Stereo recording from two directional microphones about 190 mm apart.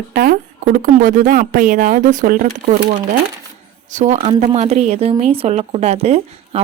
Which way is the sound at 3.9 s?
40° right (ahead or behind).